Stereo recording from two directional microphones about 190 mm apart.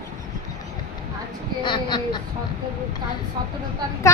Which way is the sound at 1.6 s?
25° left (ahead or behind).